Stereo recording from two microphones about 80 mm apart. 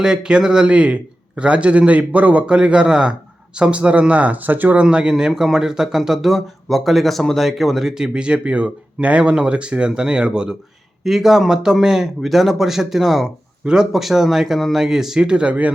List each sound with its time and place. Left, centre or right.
0.0 s a man's voice: centre